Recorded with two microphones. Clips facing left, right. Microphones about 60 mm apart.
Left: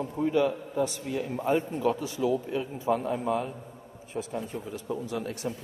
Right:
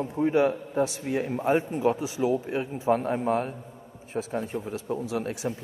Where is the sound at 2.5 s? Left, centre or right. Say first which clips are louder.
Right 3 dB; right.